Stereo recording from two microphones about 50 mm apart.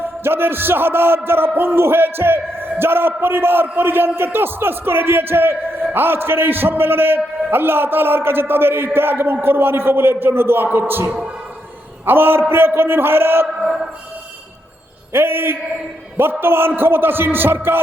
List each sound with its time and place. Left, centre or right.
0.0 s a man's voice: right
13.6 s a sound: centre
15.1 s a man's voice: right